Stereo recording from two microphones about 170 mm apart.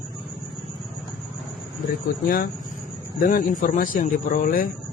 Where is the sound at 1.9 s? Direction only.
60° left (ahead or behind).